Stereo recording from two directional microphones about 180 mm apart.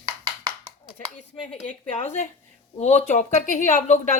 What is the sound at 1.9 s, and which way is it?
A woman's voice, 40° left (ahead or behind).